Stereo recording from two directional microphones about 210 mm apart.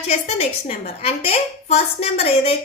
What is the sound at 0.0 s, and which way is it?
A woman's voice, 30° left (ahead or behind).